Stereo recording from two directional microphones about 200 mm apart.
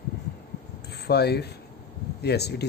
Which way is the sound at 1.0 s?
55° left (ahead or behind).